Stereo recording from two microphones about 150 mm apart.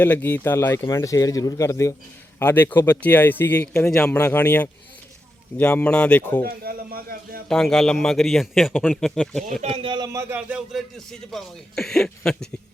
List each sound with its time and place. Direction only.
0.0 s speech: 15° left (ahead or behind)
6.4 s speech: 85° right
7.4 s a man's voice: 5° left (ahead or behind)
9.6 s speech: 40° right (ahead or behind); by 10.6 s 15° right (ahead or behind)
10.7 s a man's voice: centre (ahead or behind)